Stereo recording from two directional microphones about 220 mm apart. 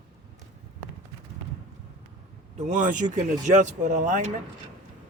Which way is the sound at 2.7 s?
35° right (ahead or behind).